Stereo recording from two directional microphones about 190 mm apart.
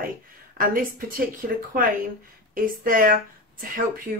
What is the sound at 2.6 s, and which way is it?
Speech, 45° right (ahead or behind).